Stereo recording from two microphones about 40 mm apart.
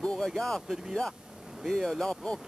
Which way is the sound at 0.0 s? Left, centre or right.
Centre.